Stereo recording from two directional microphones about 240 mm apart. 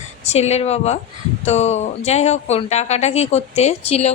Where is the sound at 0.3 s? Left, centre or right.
Left.